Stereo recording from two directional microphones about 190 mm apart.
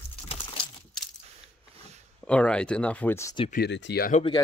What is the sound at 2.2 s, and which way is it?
Speech, 5° left (ahead or behind).